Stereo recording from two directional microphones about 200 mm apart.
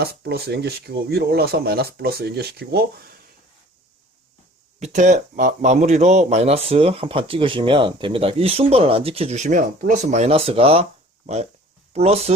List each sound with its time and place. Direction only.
0.0 s speech: 50° right (ahead or behind)
4.8 s speech: 35° right (ahead or behind)
11.9 s speech: 30° right (ahead or behind)